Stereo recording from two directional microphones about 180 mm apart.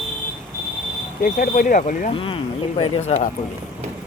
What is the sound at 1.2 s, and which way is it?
Speech, 50° left (ahead or behind).